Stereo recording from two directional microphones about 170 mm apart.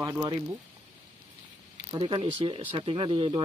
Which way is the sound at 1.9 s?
30° right (ahead or behind).